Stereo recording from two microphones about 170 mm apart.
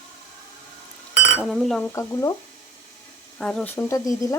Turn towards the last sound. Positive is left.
turn(degrees=20)  # may be behind; listen again after turning